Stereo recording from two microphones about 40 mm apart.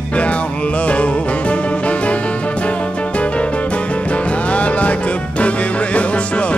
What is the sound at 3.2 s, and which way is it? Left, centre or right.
Music, left.